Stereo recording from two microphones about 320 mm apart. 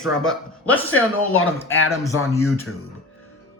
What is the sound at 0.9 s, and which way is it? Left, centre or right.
Speech, left.